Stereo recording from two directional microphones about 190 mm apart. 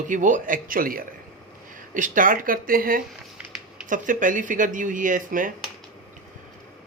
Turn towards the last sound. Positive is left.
turn(degrees=-45)  # may be behind; listen again after turning